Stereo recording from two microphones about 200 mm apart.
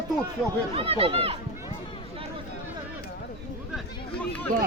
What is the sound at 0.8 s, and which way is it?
Speech, 30° right (ahead or behind).